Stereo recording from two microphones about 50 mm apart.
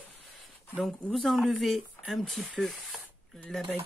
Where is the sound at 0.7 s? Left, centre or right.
Centre.